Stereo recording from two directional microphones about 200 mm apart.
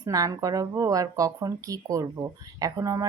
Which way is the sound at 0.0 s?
20° right (ahead or behind).